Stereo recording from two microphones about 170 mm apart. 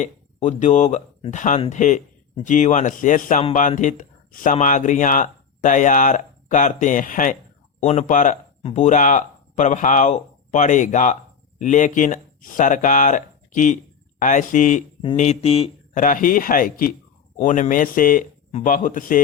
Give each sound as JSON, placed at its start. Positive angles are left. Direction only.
{"t": 0.0, "sound": "speech", "side_deg": 45}
{"t": 16.0, "sound": "speech", "side_deg": 50}